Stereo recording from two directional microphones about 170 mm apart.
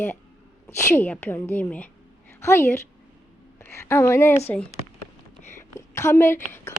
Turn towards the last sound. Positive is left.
turn(degrees=15)  # may be behind; listen again after turning